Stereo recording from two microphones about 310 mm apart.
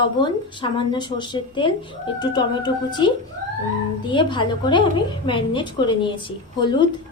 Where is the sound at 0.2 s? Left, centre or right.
Centre.